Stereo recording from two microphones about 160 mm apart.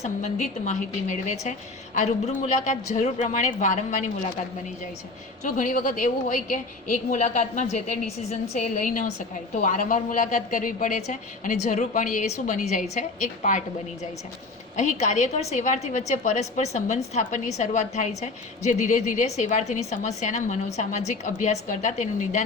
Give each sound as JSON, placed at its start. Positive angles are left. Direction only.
{"t": 0.0, "sound": "a woman's voice", "side_deg": 50}
{"t": 5.4, "sound": "a woman's voice", "side_deg": 55}